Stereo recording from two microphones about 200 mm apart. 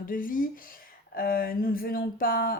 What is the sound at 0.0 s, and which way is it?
Speech, 45° left (ahead or behind).